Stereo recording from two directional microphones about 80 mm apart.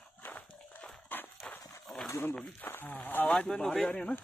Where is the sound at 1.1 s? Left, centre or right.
Left.